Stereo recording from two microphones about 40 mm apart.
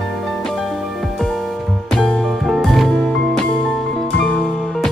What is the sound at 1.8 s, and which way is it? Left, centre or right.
Music, centre.